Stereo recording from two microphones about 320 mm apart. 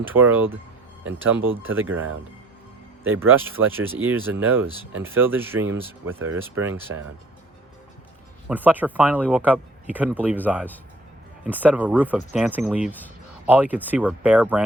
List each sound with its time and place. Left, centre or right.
0.0 s speech: centre
3.0 s speech: centre
8.4 s speech: centre